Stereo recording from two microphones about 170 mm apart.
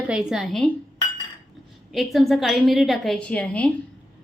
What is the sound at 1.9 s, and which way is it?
A woman's voice, centre (ahead or behind).